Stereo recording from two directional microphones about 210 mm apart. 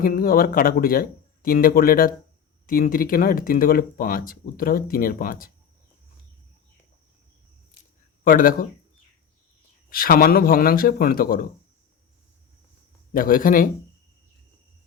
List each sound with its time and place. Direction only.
0.0 s speech: 45° left (ahead or behind)
8.2 s speech: 40° left (ahead or behind)
9.9 s speech: 45° left (ahead or behind)
13.1 s speech: 40° left (ahead or behind)